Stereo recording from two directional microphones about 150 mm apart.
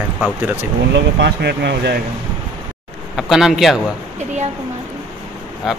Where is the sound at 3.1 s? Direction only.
Centre (ahead or behind).